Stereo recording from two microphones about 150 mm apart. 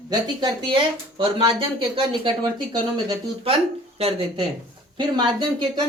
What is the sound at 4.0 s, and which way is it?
Speech, 40° right (ahead or behind).